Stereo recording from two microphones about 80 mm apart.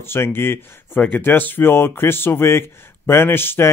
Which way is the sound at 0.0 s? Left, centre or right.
Left.